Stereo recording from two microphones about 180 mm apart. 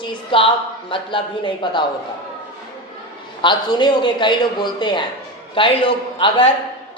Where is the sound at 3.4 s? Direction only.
25° left (ahead or behind).